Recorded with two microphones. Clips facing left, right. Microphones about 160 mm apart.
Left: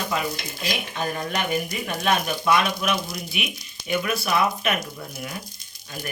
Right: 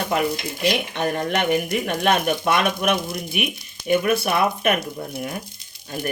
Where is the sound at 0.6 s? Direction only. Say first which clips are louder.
Right 6 dB; 65° right (ahead or behind).